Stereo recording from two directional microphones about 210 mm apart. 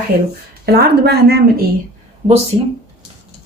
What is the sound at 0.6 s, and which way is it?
Speech, 50° right (ahead or behind).